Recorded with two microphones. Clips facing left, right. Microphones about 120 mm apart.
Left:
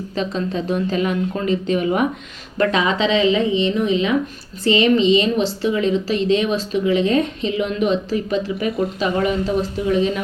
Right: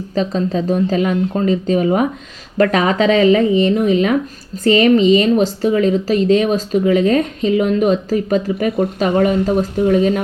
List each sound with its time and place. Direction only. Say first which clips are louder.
0.1 s speech: right 6 dB; 40° right (ahead or behind)